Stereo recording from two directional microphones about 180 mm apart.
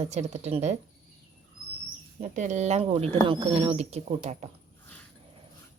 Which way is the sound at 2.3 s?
40° right (ahead or behind).